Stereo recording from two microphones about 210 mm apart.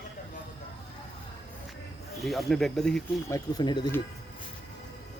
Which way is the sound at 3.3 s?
20° left (ahead or behind).